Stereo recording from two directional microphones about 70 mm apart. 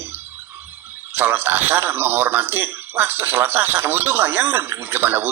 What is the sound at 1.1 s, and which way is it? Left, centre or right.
Speech, right.